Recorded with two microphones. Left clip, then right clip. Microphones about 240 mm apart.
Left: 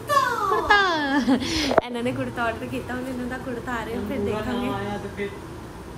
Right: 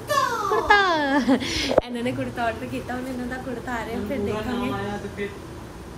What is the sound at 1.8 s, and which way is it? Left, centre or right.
Speech, left.